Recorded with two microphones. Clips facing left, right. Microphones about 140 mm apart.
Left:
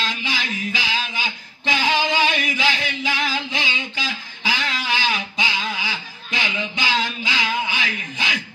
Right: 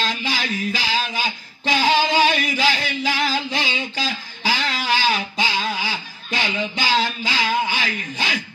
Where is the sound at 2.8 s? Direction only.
40° right (ahead or behind).